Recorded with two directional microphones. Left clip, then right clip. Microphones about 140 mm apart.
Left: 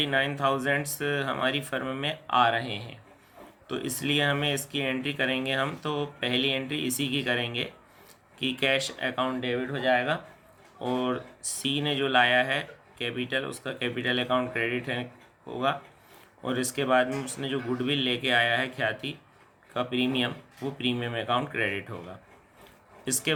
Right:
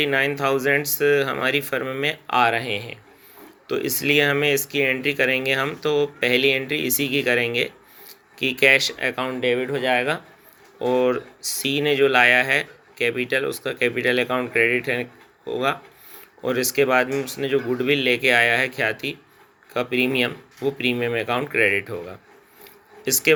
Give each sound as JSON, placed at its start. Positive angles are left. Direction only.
{"t": 0.0, "sound": "speech", "side_deg": -25}
{"t": 23.0, "sound": "speech", "side_deg": -25}